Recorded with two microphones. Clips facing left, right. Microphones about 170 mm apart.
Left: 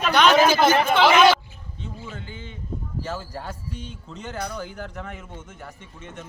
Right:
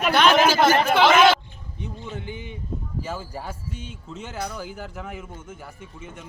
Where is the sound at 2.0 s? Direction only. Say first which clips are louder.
Right 4 dB; 15° right (ahead or behind).